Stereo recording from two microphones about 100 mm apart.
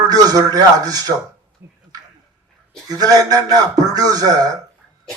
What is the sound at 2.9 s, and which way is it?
A man's voice, 40° right (ahead or behind).